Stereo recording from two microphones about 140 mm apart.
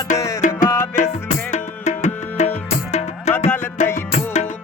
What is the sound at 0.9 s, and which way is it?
Music, 60° left (ahead or behind).